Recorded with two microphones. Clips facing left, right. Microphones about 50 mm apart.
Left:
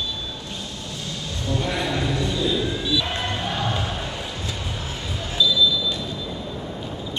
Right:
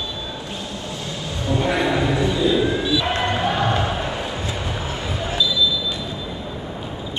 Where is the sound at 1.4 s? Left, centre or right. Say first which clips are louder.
Right 5 dB; centre.